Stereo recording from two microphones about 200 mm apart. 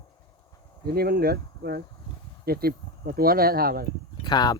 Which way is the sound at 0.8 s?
50° right (ahead or behind).